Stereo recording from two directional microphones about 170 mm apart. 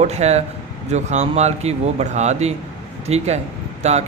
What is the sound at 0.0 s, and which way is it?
Speech, 40° right (ahead or behind).